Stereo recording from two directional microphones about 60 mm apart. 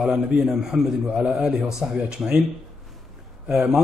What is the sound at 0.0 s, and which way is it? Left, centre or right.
A man's voice, centre.